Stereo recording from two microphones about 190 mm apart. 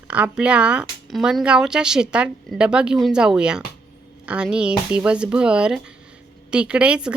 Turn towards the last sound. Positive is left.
turn(degrees=-5)  # may be behind; listen again after turning